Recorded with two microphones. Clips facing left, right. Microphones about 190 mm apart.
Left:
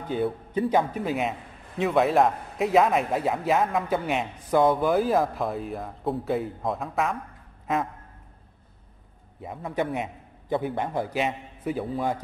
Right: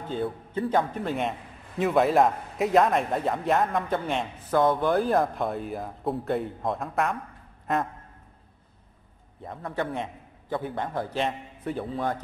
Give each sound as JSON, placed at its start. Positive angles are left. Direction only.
{"t": 0.0, "sound": "a man's voice", "side_deg": 15}
{"t": 7.6, "sound": "a sound", "side_deg": 0}
{"t": 9.4, "sound": "a man's voice", "side_deg": 5}